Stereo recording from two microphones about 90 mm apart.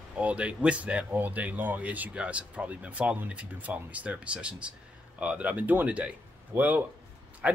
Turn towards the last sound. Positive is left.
turn(degrees=-15)  # may be behind; listen again after turning